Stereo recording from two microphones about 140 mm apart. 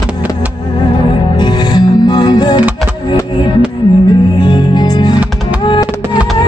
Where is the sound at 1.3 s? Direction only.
30° left (ahead or behind).